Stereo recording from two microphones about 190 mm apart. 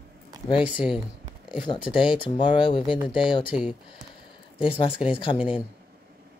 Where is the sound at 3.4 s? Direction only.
5° right (ahead or behind).